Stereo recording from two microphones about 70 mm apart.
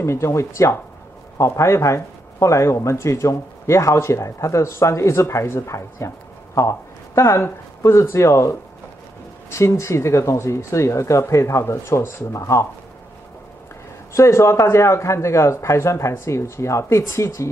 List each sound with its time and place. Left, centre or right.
0.0 s speech: left
14.1 s speech: left